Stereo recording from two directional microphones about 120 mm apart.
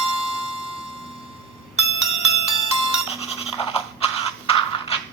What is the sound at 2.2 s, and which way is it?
Music, 55° left (ahead or behind).